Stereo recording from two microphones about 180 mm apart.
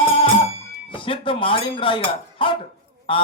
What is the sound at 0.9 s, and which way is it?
Speech, 30° left (ahead or behind).